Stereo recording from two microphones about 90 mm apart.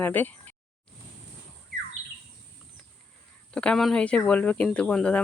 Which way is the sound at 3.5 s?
10° left (ahead or behind).